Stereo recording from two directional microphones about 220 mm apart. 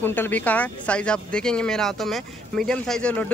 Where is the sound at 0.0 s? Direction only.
10° left (ahead or behind).